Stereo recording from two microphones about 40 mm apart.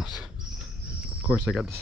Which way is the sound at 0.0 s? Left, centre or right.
Centre.